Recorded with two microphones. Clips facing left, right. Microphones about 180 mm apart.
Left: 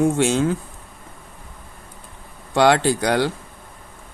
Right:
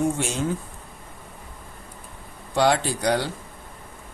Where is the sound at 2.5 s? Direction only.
85° left.